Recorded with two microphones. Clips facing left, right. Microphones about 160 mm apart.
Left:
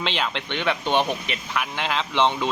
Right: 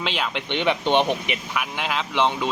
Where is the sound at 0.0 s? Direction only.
5° right (ahead or behind).